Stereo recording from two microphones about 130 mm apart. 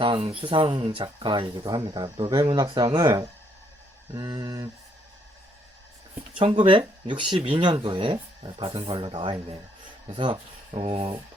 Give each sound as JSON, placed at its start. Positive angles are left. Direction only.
{"t": 0.0, "sound": "speech", "side_deg": -45}
{"t": 4.1, "sound": "a sound", "side_deg": -30}
{"t": 6.4, "sound": "speech", "side_deg": -40}